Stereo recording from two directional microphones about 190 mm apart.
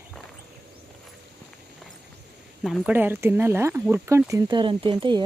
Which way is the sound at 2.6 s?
5° right (ahead or behind).